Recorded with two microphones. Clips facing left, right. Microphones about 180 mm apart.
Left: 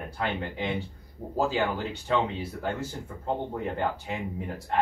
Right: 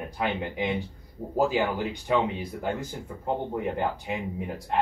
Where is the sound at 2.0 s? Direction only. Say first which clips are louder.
Right 1 dB; 15° right (ahead or behind).